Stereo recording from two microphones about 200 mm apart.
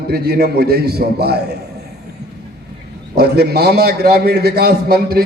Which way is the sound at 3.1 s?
55° right (ahead or behind).